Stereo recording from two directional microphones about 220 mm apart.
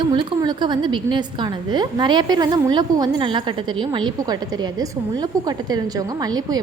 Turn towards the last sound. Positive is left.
turn(degrees=-15)  # may be behind; listen again after turning